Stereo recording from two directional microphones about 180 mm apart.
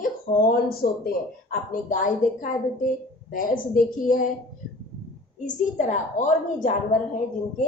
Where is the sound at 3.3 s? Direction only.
50° left (ahead or behind).